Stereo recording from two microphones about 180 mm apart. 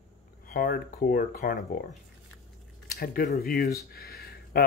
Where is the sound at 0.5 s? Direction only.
55° left (ahead or behind).